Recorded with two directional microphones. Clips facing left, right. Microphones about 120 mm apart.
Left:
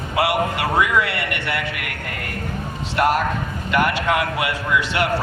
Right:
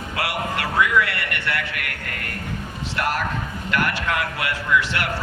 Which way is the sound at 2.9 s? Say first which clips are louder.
Left 6 dB; 20° left (ahead or behind).